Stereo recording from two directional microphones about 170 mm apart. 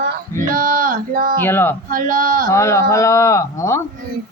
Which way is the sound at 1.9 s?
55° right (ahead or behind).